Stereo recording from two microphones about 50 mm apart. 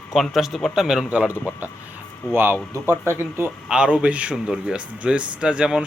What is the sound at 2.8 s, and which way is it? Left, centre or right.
Speech, right.